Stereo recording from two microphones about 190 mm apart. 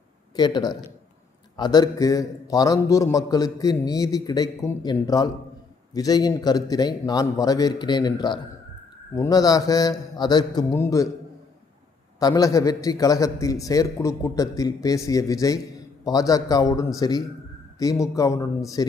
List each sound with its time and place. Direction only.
0.3 s a man's voice: 20° left (ahead or behind)
12.2 s a man's voice: 20° left (ahead or behind)